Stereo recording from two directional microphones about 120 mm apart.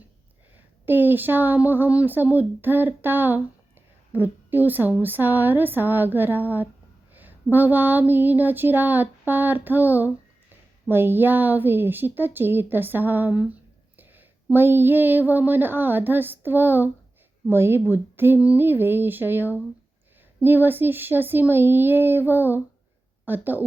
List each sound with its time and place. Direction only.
0.5 s a woman's voice: 15° right (ahead or behind)
7.1 s a sound: 15° right (ahead or behind)
9.6 s a woman's voice: 15° right (ahead or behind)